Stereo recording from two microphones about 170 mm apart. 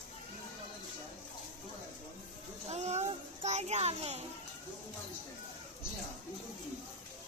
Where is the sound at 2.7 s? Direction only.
40° right (ahead or behind).